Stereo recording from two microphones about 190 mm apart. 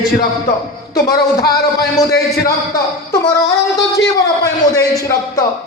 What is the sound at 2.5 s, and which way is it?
Speech, 20° left (ahead or behind).